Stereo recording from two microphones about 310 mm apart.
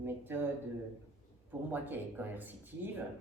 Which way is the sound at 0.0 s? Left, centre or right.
Centre.